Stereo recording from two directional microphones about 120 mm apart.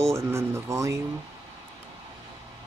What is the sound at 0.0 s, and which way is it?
Speech, 20° right (ahead or behind).